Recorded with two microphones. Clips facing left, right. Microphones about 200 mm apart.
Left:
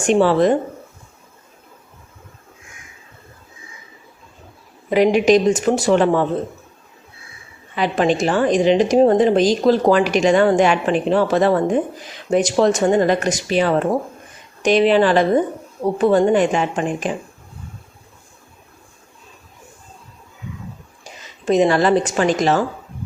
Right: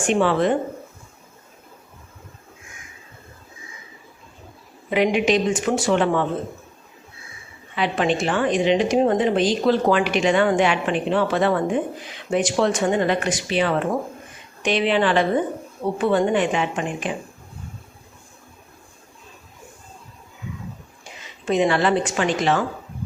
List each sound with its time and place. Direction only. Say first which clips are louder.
0.1 s a woman's voice: left 5 dB; 40° left (ahead or behind)
4.9 s a woman's voice: left 5 dB; 40° left (ahead or behind)
7.8 s a woman's voice: left 4 dB; 40° left (ahead or behind)
21.0 s a woman's voice: left 4 dB; 40° left (ahead or behind)